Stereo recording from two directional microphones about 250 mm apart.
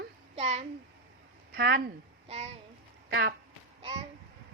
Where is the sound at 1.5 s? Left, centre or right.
Right.